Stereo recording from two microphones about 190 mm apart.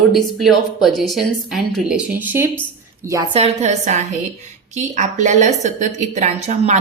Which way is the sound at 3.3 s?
35° right (ahead or behind).